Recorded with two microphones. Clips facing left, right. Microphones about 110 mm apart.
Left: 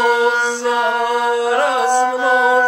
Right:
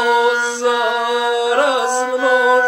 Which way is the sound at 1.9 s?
20° left (ahead or behind).